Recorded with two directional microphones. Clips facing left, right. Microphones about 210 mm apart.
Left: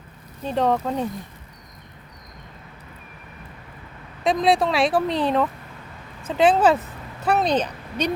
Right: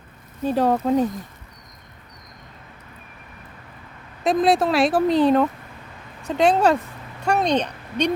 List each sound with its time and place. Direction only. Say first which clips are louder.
0.4 s a woman's voice: right 2 dB; 5° right (ahead or behind)
4.2 s a woman's voice: right 1 dB; centre (ahead or behind)